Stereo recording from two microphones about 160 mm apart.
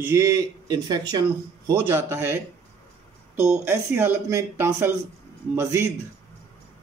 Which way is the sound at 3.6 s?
15° right (ahead or behind).